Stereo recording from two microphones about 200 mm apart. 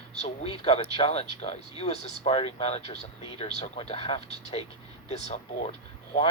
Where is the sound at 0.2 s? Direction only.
30° left (ahead or behind).